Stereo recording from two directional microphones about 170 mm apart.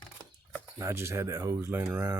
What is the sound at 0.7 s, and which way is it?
Speech, 15° right (ahead or behind).